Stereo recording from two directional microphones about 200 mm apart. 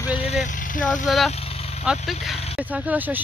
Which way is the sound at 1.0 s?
Centre (ahead or behind).